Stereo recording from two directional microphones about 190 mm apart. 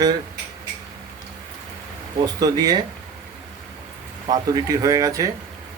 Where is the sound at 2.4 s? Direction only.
20° right (ahead or behind).